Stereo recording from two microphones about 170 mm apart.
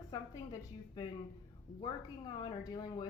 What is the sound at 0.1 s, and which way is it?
Speech, 20° left (ahead or behind).